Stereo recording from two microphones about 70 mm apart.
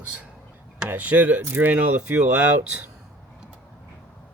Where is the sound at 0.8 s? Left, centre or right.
Right.